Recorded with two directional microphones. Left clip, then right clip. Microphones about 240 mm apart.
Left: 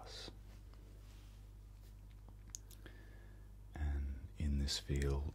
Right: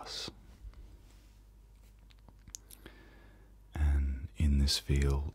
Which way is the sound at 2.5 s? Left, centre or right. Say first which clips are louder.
Right 4 dB; centre.